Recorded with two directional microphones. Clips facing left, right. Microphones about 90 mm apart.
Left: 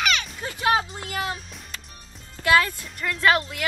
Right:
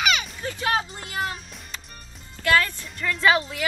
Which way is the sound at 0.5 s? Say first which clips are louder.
Left 3 dB; 15° left (ahead or behind).